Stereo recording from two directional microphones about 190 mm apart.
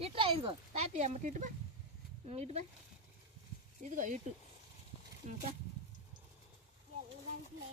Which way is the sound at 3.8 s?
40° right (ahead or behind).